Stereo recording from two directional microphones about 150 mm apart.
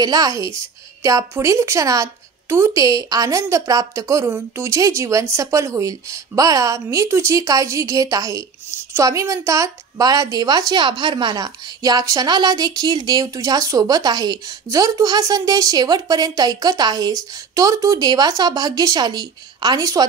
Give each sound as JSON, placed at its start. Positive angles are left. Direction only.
{"t": 0.0, "sound": "a woman's voice", "side_deg": -25}